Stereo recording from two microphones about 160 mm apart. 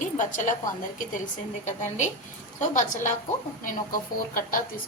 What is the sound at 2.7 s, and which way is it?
A woman's voice, 50° left (ahead or behind).